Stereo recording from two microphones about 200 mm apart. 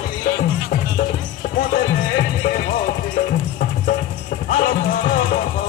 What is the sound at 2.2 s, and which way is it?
Music, 40° left (ahead or behind).